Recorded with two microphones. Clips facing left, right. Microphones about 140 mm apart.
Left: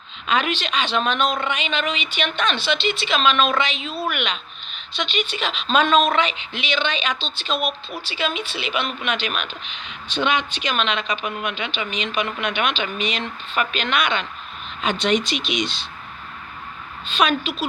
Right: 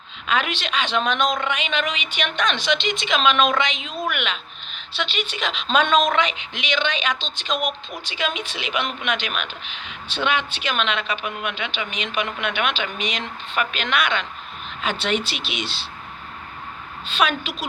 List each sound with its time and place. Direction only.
0.3 s a woman's voice: 10° right (ahead or behind)
14.8 s a woman's voice: 10° right (ahead or behind)
17.1 s a woman's voice: 10° right (ahead or behind)